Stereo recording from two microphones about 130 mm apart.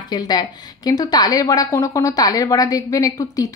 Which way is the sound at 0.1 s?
30° left (ahead or behind).